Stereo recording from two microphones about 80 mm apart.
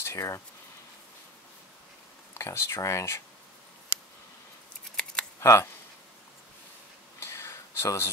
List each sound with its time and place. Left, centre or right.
0.0 s speech: left
2.3 s speech: left
5.0 s scissors: centre
5.4 s speech: left
7.2 s a sound: left